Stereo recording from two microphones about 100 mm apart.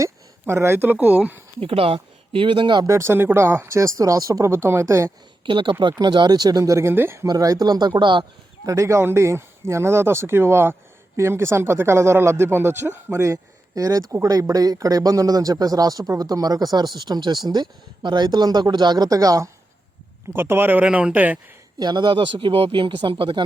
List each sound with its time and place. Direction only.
0.0 s speech: 25° right (ahead or behind)
1.5 s speech: 70° right (ahead or behind); by 2.8 s 55° right (ahead or behind)
2.8 s speech: 30° right (ahead or behind)
5.5 s speech: 55° right (ahead or behind); by 7.3 s 25° right (ahead or behind)
7.3 s speech: 35° right (ahead or behind)
8.6 s speech: 35° right (ahead or behind)
20.3 s speech: 20° right (ahead or behind)
21.8 s speech: 50° right (ahead or behind)